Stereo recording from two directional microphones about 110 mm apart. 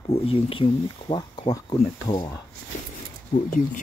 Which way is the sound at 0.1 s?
60° left (ahead or behind).